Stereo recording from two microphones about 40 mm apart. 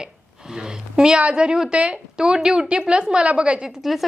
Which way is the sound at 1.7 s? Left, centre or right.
Right.